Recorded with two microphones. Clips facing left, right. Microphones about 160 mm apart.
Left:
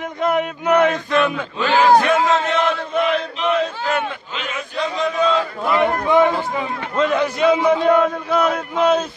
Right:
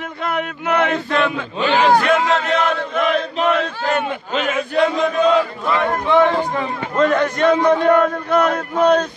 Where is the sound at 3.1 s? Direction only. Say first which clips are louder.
Right 2 dB; 40° right (ahead or behind).